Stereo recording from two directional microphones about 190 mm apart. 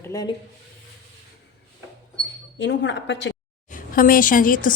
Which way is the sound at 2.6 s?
70° left (ahead or behind).